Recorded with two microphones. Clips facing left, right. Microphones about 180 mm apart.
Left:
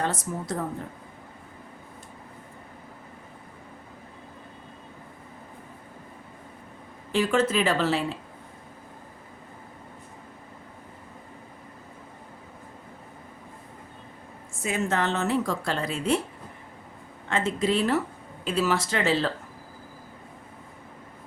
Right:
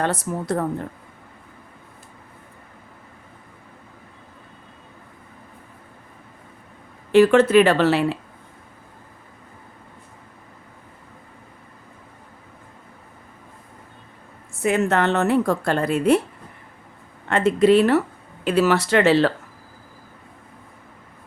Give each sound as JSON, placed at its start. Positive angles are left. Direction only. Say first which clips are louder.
{"t": 0.0, "sound": "a woman's voice", "louder": "right 5 dB", "side_deg": -65}
{"t": 7.1, "sound": "speech", "louder": "right 10 dB", "side_deg": -70}
{"t": 14.6, "sound": "a woman's voice", "louder": "right 7 dB", "side_deg": -65}
{"t": 17.2, "sound": "a woman's voice", "louder": "right 9 dB", "side_deg": -65}